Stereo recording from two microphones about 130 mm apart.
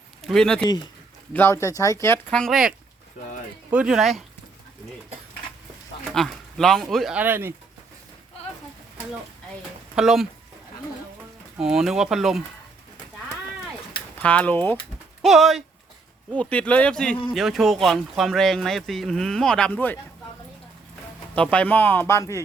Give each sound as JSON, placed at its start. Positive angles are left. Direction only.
{"t": 0.3, "sound": "speech", "side_deg": 5}
{"t": 1.3, "sound": "speech", "side_deg": 15}
{"t": 2.3, "sound": "speech", "side_deg": 0}
{"t": 6.1, "sound": "speech", "side_deg": 5}
{"t": 7.2, "sound": "speech", "side_deg": -15}
{"t": 9.9, "sound": "speech", "side_deg": -5}
{"t": 11.6, "sound": "speech", "side_deg": -5}
{"t": 14.2, "sound": "speech", "side_deg": 10}
{"t": 15.2, "sound": "speech", "side_deg": 0}
{"t": 16.3, "sound": "speech", "side_deg": 10}
{"t": 21.3, "sound": "speech", "side_deg": 10}